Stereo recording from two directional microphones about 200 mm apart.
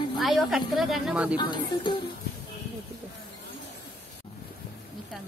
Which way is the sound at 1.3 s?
20° left (ahead or behind).